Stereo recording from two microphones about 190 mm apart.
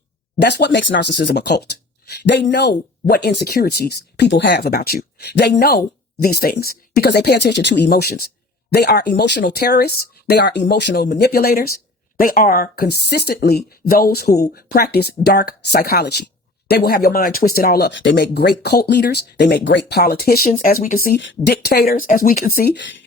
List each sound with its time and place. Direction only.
0.3 s speech: 60° left (ahead or behind)
19.9 s speech: 55° left (ahead or behind)
20.5 s speech: 40° left (ahead or behind)
21.2 s speech: 65° left (ahead or behind)